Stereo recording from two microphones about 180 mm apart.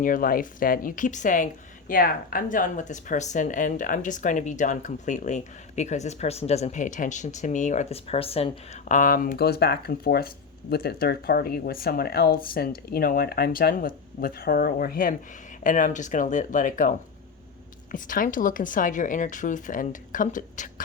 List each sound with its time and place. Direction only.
0.0 s speech: 50° left (ahead or behind)
17.9 s speech: 50° left (ahead or behind)